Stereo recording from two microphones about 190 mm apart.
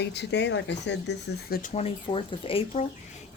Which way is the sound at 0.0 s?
65° left (ahead or behind).